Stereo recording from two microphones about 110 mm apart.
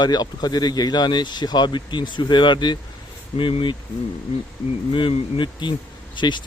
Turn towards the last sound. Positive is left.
turn(degrees=45)  # may be behind; listen again after turning